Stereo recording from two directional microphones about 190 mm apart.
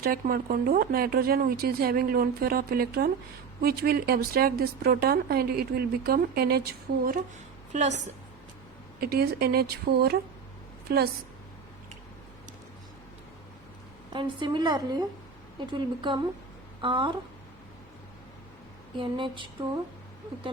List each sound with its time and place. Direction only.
0.0 s a woman's voice: 50° right (ahead or behind)
7.7 s a woman's voice: 40° right (ahead or behind)
9.0 s a woman's voice: 55° right (ahead or behind)
14.1 s a woman's voice: 25° right (ahead or behind)
18.9 s a woman's voice: 25° right (ahead or behind)